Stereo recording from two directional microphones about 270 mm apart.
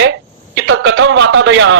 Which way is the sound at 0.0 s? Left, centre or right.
Right.